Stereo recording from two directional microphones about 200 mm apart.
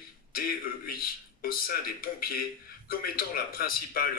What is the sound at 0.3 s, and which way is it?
A man's voice, 45° left (ahead or behind).